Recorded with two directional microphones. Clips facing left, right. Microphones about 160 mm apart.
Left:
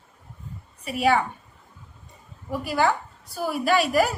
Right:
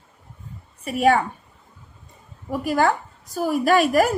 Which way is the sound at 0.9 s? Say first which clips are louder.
Right 3 dB; 45° right (ahead or behind).